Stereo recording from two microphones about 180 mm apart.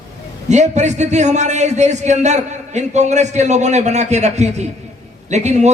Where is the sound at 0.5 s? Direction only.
40° right (ahead or behind).